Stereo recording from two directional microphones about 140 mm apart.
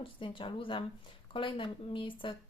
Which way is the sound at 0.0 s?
40° left (ahead or behind).